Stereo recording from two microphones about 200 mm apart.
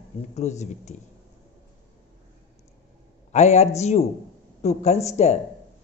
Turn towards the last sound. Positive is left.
turn(degrees=35)  # may be behind; listen again after turning